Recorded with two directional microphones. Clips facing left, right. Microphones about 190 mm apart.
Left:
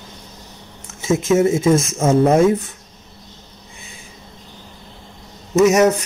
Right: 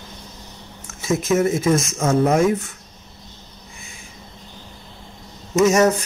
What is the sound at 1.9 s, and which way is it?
Speech, 30° left (ahead or behind).